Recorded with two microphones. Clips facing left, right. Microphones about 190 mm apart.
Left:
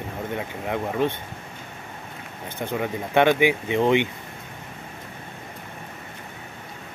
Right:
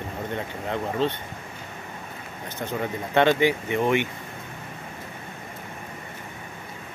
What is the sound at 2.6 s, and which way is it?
Speech, 15° left (ahead or behind).